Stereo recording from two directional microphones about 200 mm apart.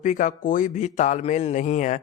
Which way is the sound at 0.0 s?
40° left (ahead or behind).